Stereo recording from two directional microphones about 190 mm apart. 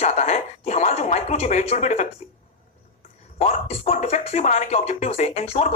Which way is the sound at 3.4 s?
35° left (ahead or behind).